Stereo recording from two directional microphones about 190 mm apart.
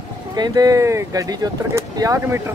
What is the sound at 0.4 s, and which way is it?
Speech, 20° right (ahead or behind).